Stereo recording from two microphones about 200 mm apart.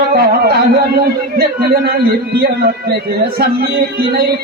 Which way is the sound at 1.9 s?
50° right (ahead or behind).